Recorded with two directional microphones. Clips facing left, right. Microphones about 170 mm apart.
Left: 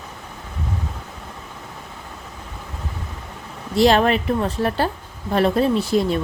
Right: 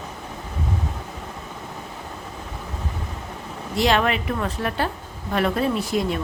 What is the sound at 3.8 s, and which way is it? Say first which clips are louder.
A woman's voice: left 5 dB; 35° left (ahead or behind).